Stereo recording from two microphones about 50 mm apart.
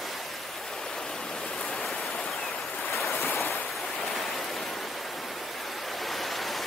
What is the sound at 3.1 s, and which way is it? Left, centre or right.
Waves, left.